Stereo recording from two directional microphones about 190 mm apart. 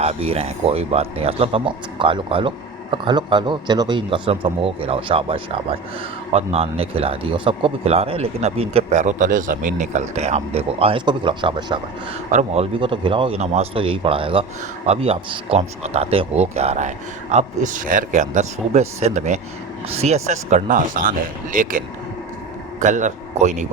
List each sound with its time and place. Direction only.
0.0 s a man's voice: 30° right (ahead or behind)
12.3 s speech: 40° right (ahead or behind)
12.8 s a man's voice: 25° right (ahead or behind)